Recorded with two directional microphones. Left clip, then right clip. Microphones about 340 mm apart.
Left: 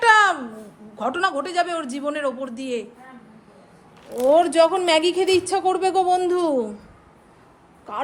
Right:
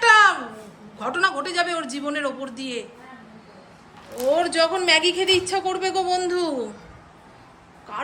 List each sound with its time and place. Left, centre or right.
0.0 s a sound: centre
0.9 s speech: centre
4.3 s speech: centre
7.9 s speech: centre